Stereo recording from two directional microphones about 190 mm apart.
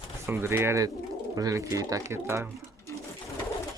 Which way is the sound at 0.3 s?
15° right (ahead or behind).